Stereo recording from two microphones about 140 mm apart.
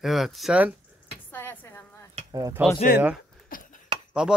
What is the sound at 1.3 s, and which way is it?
Speech, 15° left (ahead or behind).